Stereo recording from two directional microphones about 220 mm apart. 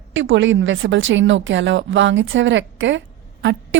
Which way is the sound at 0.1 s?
60° right (ahead or behind).